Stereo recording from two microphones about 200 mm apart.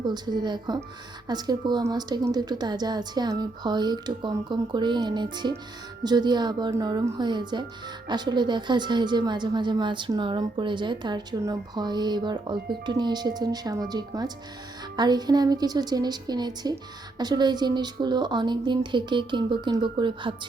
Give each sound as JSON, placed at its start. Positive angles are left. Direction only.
{"t": 0.0, "sound": "a woman's voice", "side_deg": -20}